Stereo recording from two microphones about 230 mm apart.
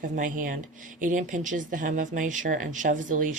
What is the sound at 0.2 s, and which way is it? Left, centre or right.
Speech, right.